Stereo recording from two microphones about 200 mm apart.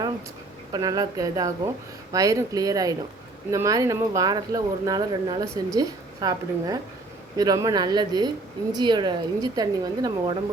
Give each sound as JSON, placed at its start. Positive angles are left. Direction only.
{"t": 0.7, "sound": "a woman's voice", "side_deg": -20}